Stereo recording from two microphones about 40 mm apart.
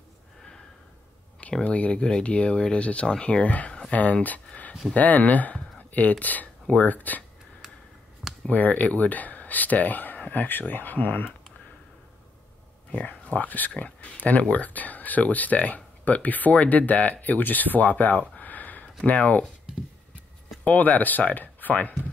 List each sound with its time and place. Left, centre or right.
1.6 s speech: left
1.9 s speech: left
3.3 s speech: left
8.5 s speech: left
13.2 s speech: left
18.3 s a sound: left
18.9 s speech: left
20.6 s speech: left